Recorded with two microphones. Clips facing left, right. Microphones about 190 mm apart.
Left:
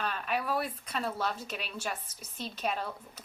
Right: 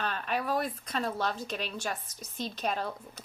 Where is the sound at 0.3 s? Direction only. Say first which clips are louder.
Right 2 dB; 40° right (ahead or behind).